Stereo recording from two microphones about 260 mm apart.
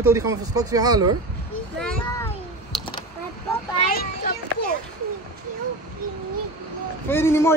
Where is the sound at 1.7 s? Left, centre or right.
Centre.